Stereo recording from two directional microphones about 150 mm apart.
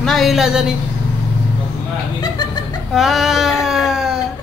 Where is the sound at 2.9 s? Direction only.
Centre (ahead or behind).